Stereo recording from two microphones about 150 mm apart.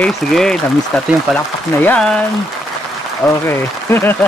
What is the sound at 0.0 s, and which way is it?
Speech, centre (ahead or behind).